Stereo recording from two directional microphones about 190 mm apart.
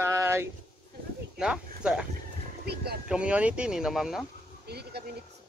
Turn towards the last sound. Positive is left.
turn(degrees=-60)  # may be behind; listen again after turning